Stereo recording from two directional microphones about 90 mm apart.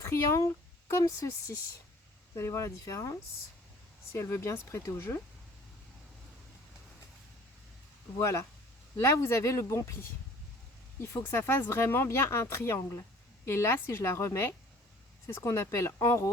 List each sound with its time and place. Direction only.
0.0 s speech: 35° left (ahead or behind)
8.2 s speech: 35° left (ahead or behind)